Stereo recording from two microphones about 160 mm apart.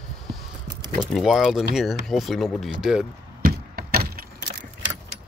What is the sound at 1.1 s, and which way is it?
Speech, centre (ahead or behind).